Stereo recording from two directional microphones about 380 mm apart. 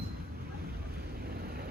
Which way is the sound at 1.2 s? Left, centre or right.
Right.